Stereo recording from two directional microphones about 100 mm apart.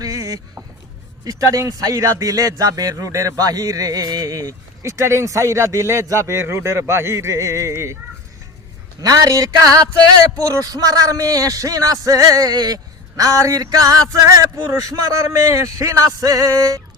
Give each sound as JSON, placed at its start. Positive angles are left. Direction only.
{"t": 0.0, "sound": "a sound", "side_deg": -35}
{"t": 1.2, "sound": "speech", "side_deg": -35}
{"t": 9.0, "sound": "speech", "side_deg": -40}